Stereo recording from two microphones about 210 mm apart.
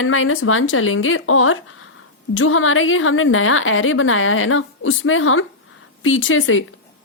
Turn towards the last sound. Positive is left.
turn(degrees=70)  # may be behind; listen again after turning